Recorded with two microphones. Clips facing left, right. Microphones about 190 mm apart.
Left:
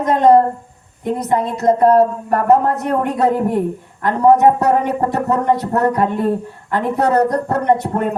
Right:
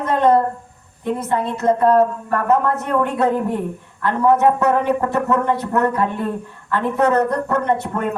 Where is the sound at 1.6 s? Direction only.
40° left (ahead or behind).